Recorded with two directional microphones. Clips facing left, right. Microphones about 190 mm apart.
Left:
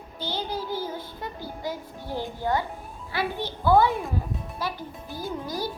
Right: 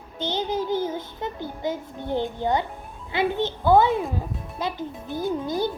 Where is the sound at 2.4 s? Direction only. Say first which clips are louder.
Right 2 dB; 20° right (ahead or behind).